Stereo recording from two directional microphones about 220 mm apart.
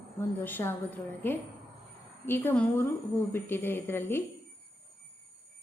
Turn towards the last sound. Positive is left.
turn(degrees=10)  # may be behind; listen again after turning